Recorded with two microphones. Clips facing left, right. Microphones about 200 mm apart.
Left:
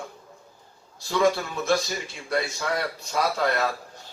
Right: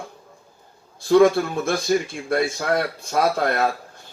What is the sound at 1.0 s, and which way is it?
A man's voice, 55° right (ahead or behind).